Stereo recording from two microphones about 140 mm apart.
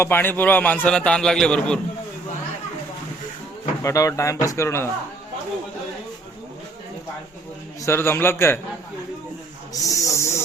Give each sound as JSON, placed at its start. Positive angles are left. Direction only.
{"t": 0.0, "sound": "a man's voice", "side_deg": 15}
{"t": 3.8, "sound": "speech", "side_deg": 20}
{"t": 7.8, "sound": "a man's voice", "side_deg": 20}
{"t": 9.8, "sound": "speech", "side_deg": 25}